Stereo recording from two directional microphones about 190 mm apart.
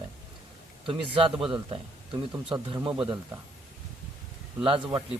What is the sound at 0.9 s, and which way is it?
Speech, 25° right (ahead or behind).